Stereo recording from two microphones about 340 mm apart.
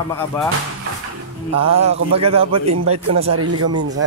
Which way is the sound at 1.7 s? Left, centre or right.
Centre.